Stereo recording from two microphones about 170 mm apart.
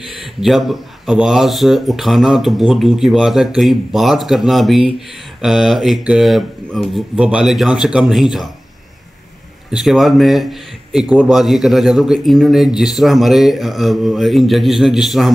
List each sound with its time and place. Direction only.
0.4 s speech: centre (ahead or behind)
9.7 s speech: centre (ahead or behind)